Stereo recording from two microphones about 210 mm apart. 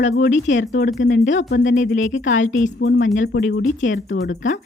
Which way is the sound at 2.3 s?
35° left (ahead or behind).